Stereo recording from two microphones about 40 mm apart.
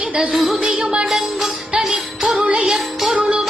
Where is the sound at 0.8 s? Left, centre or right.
Right.